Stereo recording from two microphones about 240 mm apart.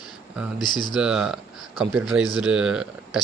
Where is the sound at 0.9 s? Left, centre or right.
Centre.